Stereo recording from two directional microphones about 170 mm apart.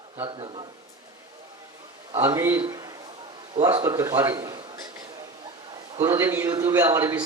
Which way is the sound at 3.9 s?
15° right (ahead or behind).